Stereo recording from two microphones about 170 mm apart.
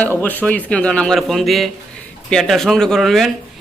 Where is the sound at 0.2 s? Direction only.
10° left (ahead or behind).